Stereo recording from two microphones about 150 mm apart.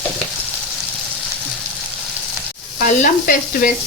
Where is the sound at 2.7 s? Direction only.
65° left (ahead or behind).